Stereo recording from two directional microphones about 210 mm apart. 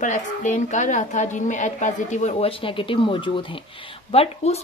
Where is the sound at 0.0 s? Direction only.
35° left (ahead or behind).